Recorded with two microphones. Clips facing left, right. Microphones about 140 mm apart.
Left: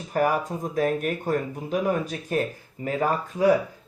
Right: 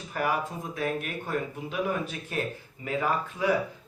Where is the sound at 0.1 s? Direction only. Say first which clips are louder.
Left 6 dB; 40° left (ahead or behind).